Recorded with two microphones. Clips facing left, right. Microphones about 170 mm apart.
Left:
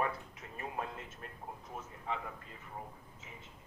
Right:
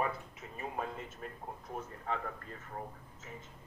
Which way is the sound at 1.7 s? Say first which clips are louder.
Right 2 dB; 40° right (ahead or behind).